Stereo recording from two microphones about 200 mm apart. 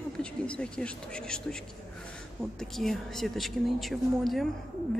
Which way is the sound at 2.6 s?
Centre (ahead or behind).